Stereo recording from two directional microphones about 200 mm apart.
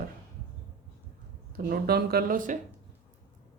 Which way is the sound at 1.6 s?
50° right (ahead or behind).